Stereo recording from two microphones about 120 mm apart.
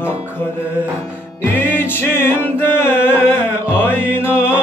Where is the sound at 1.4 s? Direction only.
15° left (ahead or behind).